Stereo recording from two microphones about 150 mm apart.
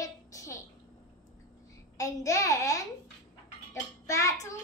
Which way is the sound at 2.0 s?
20° left (ahead or behind).